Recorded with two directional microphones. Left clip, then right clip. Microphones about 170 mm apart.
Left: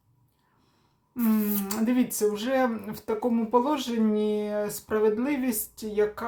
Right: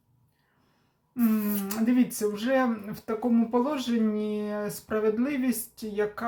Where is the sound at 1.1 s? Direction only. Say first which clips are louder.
Even; 20° left (ahead or behind).